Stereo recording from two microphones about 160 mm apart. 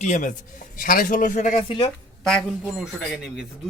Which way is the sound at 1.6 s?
35° left (ahead or behind).